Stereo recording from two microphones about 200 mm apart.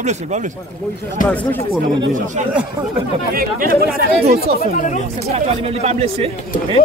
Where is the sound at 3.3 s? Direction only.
45° right (ahead or behind).